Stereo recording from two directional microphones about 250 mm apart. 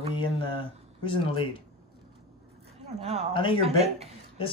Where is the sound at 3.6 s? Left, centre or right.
Right.